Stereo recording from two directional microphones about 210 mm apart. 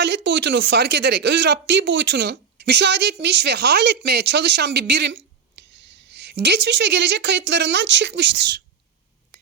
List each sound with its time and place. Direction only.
0.0 s a woman's voice: 55° right (ahead or behind)